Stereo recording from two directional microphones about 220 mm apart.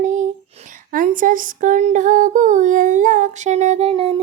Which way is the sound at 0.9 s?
40° right (ahead or behind).